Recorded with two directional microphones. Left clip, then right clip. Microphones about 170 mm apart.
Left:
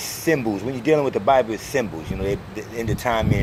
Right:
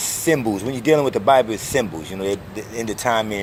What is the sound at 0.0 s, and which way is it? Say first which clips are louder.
Speech: right 2 dB; 30° right (ahead or behind).